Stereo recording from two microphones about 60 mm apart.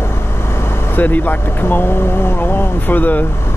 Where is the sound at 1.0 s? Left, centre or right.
Left.